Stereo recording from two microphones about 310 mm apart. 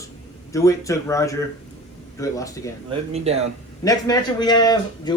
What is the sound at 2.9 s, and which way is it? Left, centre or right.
Speech, centre.